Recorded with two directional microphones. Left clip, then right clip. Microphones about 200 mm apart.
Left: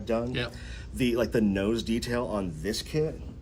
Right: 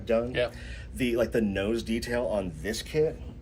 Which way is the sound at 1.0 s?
40° left (ahead or behind).